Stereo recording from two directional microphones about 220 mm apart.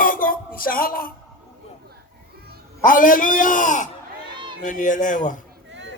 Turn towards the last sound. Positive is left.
turn(degrees=35)  # may be behind; listen again after turning